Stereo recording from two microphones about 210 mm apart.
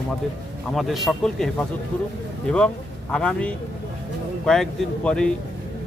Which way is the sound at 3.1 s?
5° left (ahead or behind).